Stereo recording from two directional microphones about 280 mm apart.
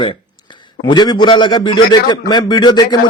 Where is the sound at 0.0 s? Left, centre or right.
Centre.